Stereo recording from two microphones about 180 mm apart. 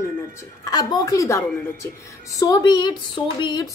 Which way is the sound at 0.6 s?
20° left (ahead or behind).